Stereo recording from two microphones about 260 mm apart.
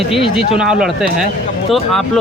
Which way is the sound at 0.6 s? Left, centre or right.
Centre.